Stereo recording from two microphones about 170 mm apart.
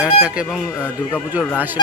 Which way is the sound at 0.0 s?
5° right (ahead or behind).